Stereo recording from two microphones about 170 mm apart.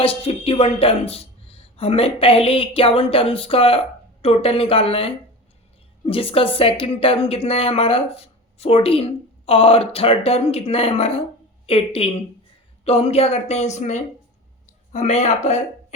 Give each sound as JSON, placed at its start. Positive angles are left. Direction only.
{"t": 0.0, "sound": "a woman's voice", "side_deg": 35}